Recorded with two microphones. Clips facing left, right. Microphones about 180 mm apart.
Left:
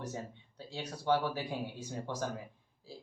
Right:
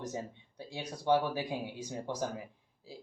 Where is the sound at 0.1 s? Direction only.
15° right (ahead or behind).